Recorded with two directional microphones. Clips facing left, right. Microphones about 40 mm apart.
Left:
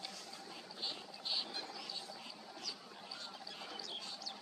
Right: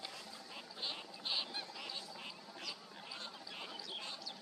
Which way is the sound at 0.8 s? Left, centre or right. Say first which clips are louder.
Right 1 dB; right.